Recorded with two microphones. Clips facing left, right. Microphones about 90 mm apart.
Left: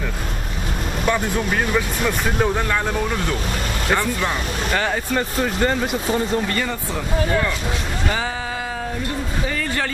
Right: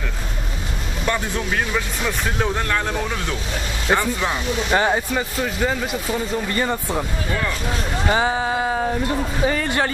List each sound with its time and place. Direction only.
1.0 s speech: 5° left (ahead or behind)
3.9 s speech: 5° right (ahead or behind)
4.7 s speech: 20° right (ahead or behind)
5.1 s speech: 5° right (ahead or behind)
6.5 s speech: 20° right (ahead or behind)
8.1 s speech: 25° right (ahead or behind)